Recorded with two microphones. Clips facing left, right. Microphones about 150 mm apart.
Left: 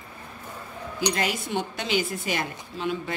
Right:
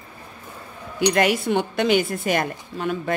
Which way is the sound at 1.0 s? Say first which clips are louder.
Right 8 dB; 60° right (ahead or behind).